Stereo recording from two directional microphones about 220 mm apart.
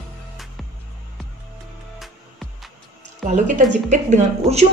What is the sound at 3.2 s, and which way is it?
A woman's voice, 35° right (ahead or behind).